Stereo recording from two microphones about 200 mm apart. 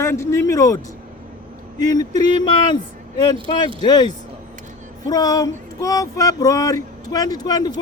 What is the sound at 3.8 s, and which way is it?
A man's voice, 20° left (ahead or behind).